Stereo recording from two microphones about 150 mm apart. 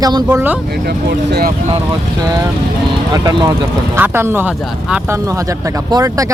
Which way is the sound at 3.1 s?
30° right (ahead or behind).